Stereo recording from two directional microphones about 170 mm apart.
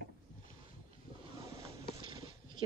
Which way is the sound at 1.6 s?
30° right (ahead or behind).